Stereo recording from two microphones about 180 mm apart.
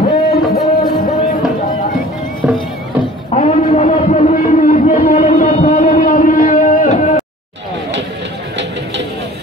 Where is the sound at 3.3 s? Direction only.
40° left (ahead or behind).